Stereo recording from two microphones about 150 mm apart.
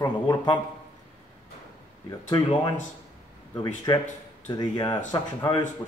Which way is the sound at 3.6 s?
30° left (ahead or behind).